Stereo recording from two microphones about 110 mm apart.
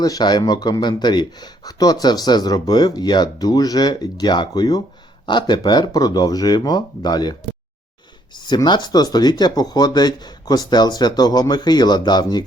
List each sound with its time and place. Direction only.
0.0 s speech: 35° left (ahead or behind)